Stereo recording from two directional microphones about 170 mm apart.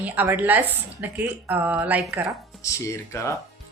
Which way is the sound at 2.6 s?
15° left (ahead or behind).